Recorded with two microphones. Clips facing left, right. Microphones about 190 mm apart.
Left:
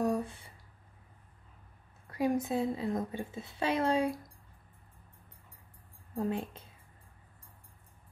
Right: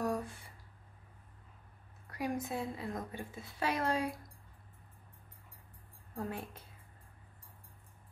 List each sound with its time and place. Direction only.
0.0 s a sound: 25° left (ahead or behind)
2.0 s a woman's voice: 25° left (ahead or behind)
6.1 s a woman's voice: 20° left (ahead or behind)